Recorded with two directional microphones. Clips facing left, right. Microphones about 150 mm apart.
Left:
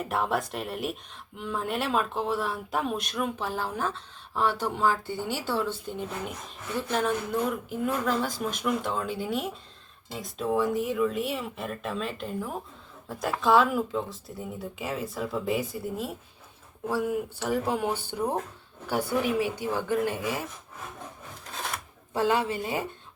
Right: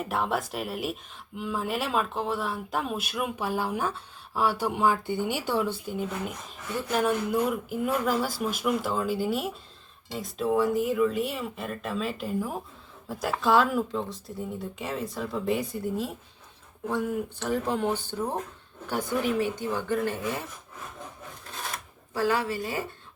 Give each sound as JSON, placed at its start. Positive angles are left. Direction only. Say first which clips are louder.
{"t": 0.0, "sound": "speech", "louder": "even", "side_deg": 0}
{"t": 22.1, "sound": "a woman's voice", "louder": "left 1 dB", "side_deg": 20}